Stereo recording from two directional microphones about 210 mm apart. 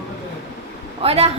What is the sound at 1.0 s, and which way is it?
Speech, 30° right (ahead or behind).